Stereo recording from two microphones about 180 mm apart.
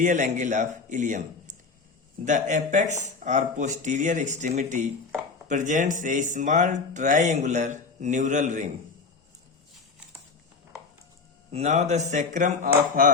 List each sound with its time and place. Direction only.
0.0 s speech: 45° right (ahead or behind)
11.5 s speech: 35° right (ahead or behind)